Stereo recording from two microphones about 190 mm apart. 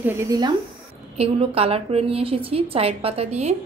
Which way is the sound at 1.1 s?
30° right (ahead or behind).